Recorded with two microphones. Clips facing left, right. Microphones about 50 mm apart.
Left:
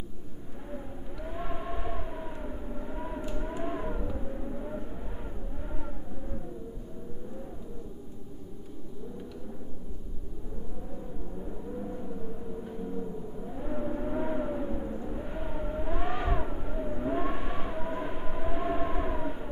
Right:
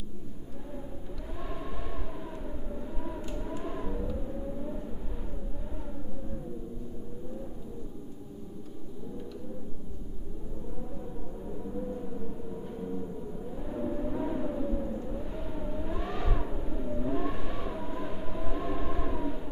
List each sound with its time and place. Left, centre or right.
1.4 s a sound: left
2.7 s vehicle: left
13.6 s vehicle: left